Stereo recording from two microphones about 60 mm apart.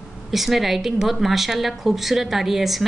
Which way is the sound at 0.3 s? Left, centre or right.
Centre.